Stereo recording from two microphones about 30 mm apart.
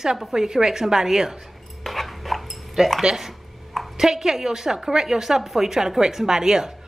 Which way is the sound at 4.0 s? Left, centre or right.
Centre.